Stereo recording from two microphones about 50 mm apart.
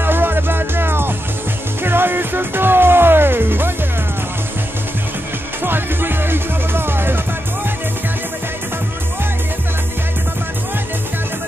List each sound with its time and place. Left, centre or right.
0.0 s music: right
5.6 s music: right